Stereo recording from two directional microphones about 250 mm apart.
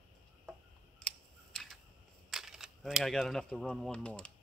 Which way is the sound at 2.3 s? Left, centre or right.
Centre.